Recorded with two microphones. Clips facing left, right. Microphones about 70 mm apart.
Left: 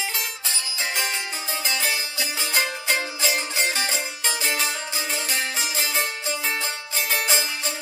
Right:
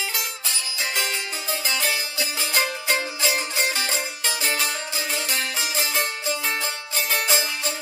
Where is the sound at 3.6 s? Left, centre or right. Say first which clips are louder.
Even; left.